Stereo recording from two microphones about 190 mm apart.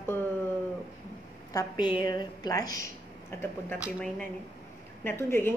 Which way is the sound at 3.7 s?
5° right (ahead or behind).